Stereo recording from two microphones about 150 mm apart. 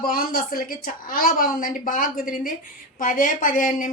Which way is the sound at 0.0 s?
75° left (ahead or behind).